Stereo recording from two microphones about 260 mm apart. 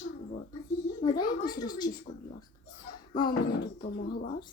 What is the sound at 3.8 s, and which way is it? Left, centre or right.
Speech, left.